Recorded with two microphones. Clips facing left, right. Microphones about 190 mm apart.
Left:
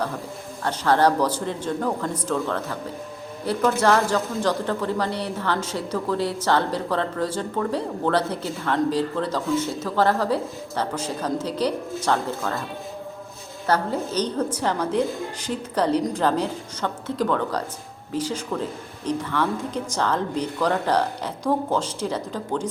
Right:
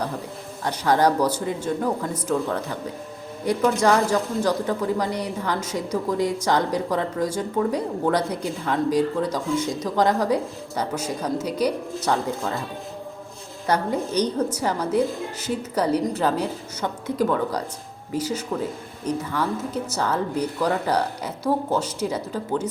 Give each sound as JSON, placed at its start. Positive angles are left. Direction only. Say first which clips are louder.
{"t": 0.6, "sound": "speech", "louder": "even", "side_deg": -10}
{"t": 13.7, "sound": "speech", "louder": "even", "side_deg": -15}